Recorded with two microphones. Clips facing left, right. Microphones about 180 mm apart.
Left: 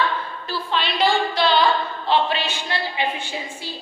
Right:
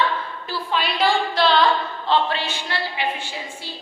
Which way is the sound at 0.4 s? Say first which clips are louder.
Even; 5° right (ahead or behind).